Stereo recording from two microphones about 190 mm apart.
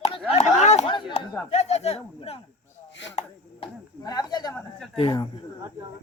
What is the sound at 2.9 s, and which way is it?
Chopping, 70° left (ahead or behind).